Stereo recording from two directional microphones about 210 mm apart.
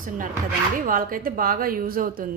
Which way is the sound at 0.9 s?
40° right (ahead or behind).